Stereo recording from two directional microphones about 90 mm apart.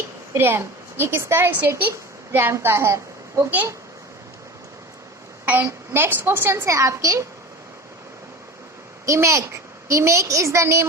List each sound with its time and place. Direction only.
0.3 s a woman's voice: 25° right (ahead or behind)
5.5 s a woman's voice: 25° right (ahead or behind)
9.0 s a woman's voice: 35° right (ahead or behind)